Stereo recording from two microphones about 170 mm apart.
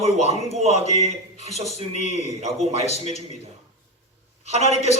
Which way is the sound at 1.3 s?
40° left (ahead or behind).